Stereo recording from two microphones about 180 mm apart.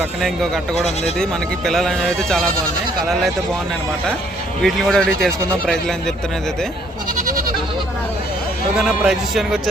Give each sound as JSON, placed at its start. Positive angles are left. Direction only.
{"t": 0.2, "sound": "speech", "side_deg": 0}
{"t": 4.6, "sound": "speech", "side_deg": 0}
{"t": 7.2, "sound": "goat", "side_deg": -50}
{"t": 8.8, "sound": "speech", "side_deg": 0}